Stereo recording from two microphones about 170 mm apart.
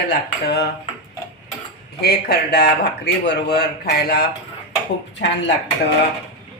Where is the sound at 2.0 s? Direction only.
70° left (ahead or behind).